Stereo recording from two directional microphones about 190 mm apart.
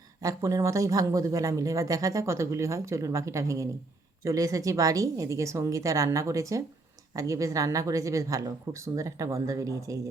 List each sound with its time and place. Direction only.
0.2 s speech: 15° right (ahead or behind)